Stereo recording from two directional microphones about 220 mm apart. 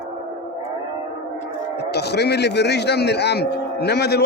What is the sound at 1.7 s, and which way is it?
A man's voice, 50° left (ahead or behind).